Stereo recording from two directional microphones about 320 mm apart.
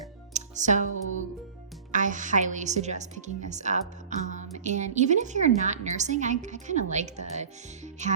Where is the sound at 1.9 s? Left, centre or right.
Right.